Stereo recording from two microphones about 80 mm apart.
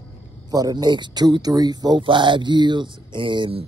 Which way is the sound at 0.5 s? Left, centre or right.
Right.